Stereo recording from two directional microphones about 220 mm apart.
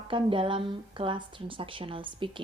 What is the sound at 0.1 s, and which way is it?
Speech, 25° right (ahead or behind).